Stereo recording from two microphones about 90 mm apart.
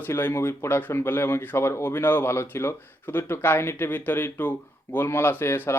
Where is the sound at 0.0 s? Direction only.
25° left (ahead or behind).